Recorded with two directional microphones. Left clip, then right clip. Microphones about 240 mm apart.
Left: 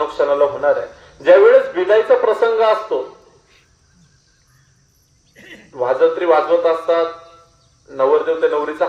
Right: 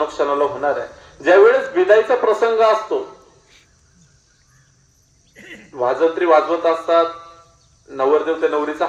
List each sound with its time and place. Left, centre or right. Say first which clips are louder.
0.2 s speech: left 5 dB; right
5.3 s a sound: right 1 dB; centre
5.7 s speech: left 2 dB; right